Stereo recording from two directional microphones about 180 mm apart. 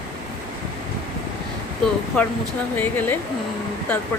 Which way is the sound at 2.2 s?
5° left (ahead or behind).